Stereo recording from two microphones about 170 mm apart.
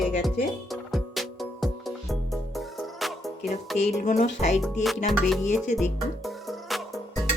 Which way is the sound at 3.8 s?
45° left (ahead or behind).